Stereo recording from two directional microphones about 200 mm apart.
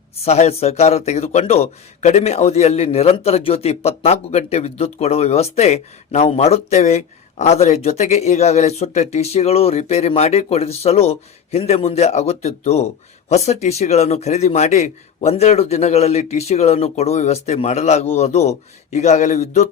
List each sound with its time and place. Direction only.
0.3 s a man's voice: 30° left (ahead or behind)